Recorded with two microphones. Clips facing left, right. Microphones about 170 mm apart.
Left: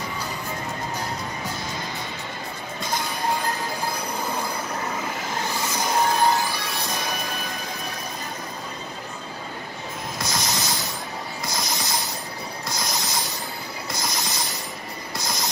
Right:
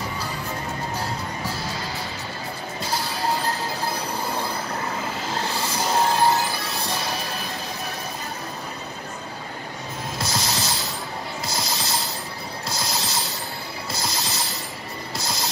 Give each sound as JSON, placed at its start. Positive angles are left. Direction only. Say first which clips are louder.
{"t": 3.0, "sound": "music", "louder": "even", "side_deg": -30}
{"t": 5.7, "sound": "music", "louder": "right 1 dB", "side_deg": -30}
{"t": 10.1, "sound": "music", "louder": "right 1 dB", "side_deg": -25}
{"t": 11.8, "sound": "a sound", "louder": "right 1 dB", "side_deg": -25}
{"t": 12.6, "sound": "music", "louder": "right 1 dB", "side_deg": -25}
{"t": 13.9, "sound": "a sound", "louder": "right 1 dB", "side_deg": -25}
{"t": 15.1, "sound": "mechanisms", "louder": "even", "side_deg": -25}